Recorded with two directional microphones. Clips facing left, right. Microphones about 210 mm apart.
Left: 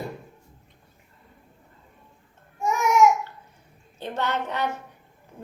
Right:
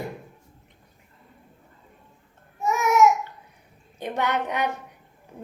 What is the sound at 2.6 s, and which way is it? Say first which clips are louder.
Babbling: even; 5° right (ahead or behind).